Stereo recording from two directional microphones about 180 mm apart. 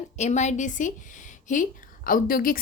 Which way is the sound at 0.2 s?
40° left (ahead or behind).